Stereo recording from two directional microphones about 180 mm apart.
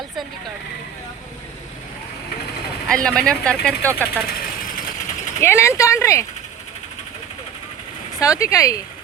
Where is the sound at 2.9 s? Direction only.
5° left (ahead or behind).